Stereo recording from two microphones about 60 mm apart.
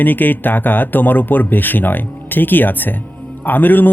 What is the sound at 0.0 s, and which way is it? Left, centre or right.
A man's voice, left.